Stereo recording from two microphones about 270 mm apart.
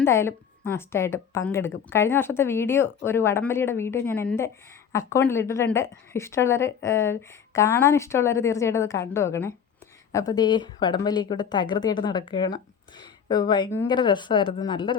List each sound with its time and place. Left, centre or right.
0.0 s speech: centre